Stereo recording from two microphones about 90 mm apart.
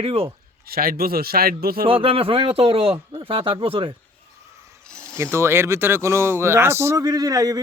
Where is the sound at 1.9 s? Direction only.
85° right.